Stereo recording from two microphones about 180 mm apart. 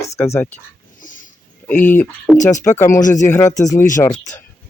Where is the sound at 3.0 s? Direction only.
45° left (ahead or behind).